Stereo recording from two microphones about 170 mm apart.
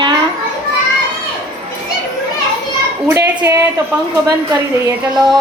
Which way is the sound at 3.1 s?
15° right (ahead or behind).